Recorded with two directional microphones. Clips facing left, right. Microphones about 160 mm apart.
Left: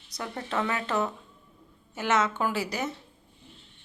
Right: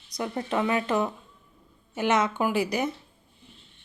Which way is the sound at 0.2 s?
20° right (ahead or behind).